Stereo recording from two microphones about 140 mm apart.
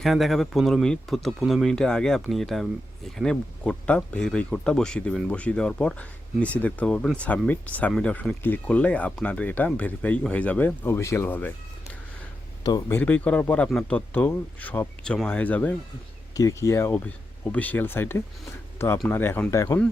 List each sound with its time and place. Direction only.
0.0 s speech: centre (ahead or behind)
12.9 s speech: 10° left (ahead or behind)
16.3 s speech: 25° left (ahead or behind)